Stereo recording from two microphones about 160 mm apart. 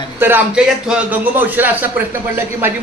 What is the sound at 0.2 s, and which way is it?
A man's voice, 10° right (ahead or behind).